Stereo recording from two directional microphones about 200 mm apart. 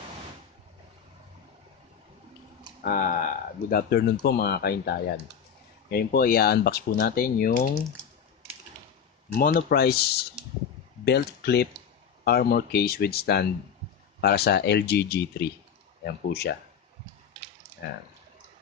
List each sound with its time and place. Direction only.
2.8 s speech: 45° left (ahead or behind)
9.3 s speech: 45° left (ahead or behind)